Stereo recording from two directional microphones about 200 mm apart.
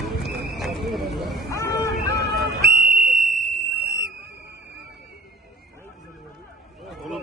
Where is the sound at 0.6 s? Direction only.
Centre (ahead or behind).